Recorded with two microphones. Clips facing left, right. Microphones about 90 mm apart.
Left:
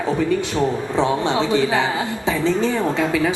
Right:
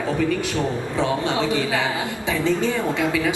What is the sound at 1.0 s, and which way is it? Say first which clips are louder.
A woman's voice: left 3 dB; 25° left (ahead or behind).